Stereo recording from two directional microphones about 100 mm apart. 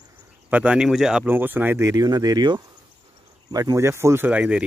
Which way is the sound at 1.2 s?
20° right (ahead or behind).